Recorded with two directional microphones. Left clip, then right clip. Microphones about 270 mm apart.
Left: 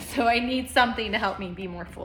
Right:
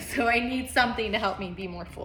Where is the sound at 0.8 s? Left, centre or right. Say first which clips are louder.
Left 2 dB; left.